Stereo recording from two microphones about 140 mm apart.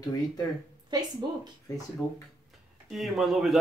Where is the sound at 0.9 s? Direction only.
30° right (ahead or behind).